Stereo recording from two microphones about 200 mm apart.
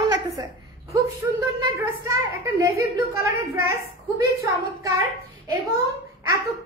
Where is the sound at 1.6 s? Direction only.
15° right (ahead or behind).